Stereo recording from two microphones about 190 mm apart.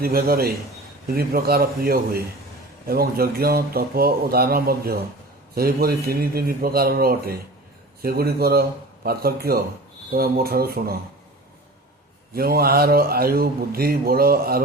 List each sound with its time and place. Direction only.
0.0 s speech: 50° right (ahead or behind)
12.3 s speech: 50° right (ahead or behind)